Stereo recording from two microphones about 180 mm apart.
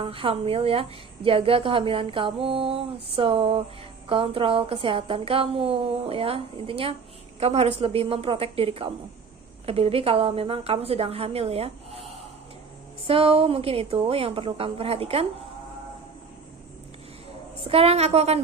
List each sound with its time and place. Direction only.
0.0 s a woman's voice: 30° right (ahead or behind)
17.6 s a woman's voice: 35° right (ahead or behind)